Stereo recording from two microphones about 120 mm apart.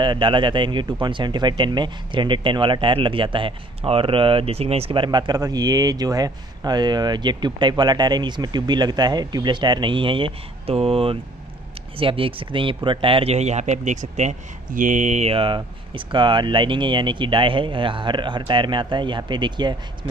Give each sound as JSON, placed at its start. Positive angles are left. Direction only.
{"t": 0.0, "sound": "speech", "side_deg": -40}
{"t": 14.8, "sound": "speech", "side_deg": -90}
{"t": 15.3, "sound": "speech", "side_deg": -45}